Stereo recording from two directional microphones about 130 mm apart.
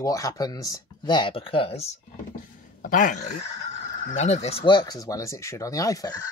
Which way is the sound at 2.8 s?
90° left.